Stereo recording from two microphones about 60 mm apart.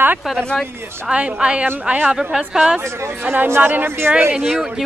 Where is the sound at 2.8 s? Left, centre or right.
Right.